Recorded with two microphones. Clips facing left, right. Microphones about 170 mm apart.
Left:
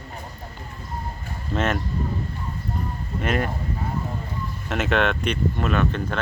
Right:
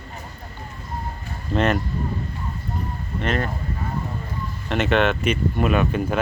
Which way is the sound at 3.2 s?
10° left (ahead or behind).